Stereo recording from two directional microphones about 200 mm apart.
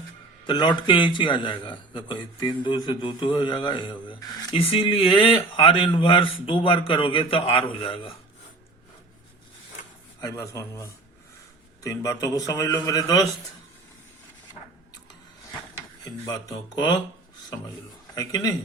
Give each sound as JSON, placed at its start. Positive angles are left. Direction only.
{"t": 0.4, "sound": "a man's voice", "side_deg": 20}
{"t": 10.2, "sound": "a man's voice", "side_deg": 15}
{"t": 16.2, "sound": "a man's voice", "side_deg": 20}
{"t": 18.1, "sound": "a man's voice", "side_deg": 15}